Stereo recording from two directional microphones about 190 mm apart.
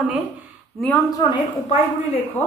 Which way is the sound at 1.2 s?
25° left (ahead or behind).